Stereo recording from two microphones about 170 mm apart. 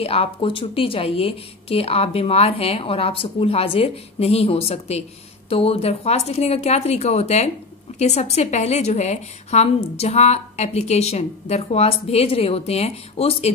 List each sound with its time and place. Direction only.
0.0 s a woman's voice: 35° left (ahead or behind)